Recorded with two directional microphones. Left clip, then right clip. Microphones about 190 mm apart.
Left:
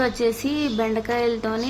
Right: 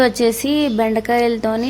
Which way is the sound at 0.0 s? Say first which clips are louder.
Right 6 dB; 30° right (ahead or behind).